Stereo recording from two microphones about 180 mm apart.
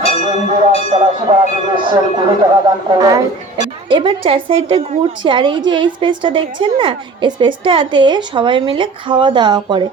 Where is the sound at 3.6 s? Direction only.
25° right (ahead or behind).